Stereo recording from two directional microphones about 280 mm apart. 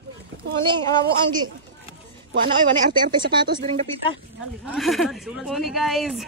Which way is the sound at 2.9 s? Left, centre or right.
Centre.